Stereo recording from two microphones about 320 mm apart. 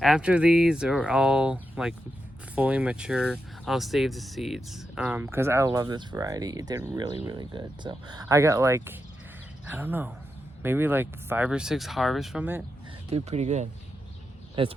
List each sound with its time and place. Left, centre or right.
0.0 s speech: centre
13.1 s speech: centre